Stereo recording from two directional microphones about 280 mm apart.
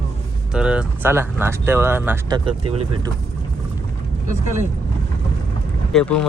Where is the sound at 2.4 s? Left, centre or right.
Centre.